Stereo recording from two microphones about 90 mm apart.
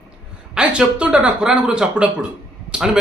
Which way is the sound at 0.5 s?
10° right (ahead or behind).